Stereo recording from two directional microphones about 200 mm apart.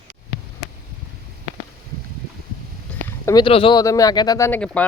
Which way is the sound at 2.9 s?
5° left (ahead or behind).